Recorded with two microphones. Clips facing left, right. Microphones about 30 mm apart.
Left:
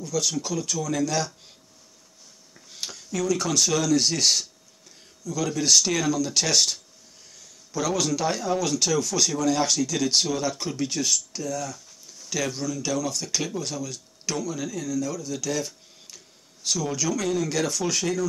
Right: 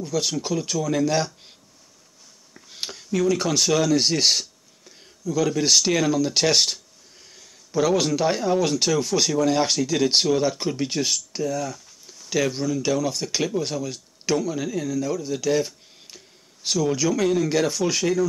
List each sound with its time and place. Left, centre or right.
0.0 s speech: right
2.7 s speech: right